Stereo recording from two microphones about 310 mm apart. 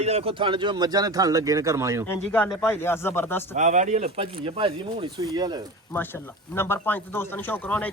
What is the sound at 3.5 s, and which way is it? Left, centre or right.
Speech, right.